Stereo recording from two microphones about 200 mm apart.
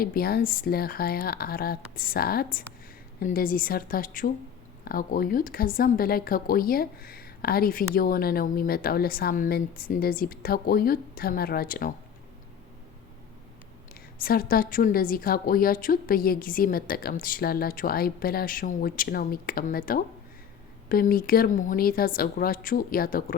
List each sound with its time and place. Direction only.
0.0 s speech: 50° left (ahead or behind)
14.2 s speech: 45° left (ahead or behind)